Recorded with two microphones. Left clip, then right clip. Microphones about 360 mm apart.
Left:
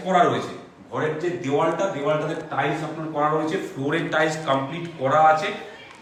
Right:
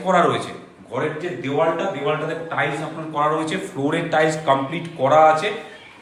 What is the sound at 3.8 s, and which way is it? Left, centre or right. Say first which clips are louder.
A man's voice: right 4 dB; centre.